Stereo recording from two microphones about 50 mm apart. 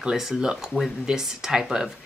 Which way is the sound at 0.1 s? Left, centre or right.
Centre.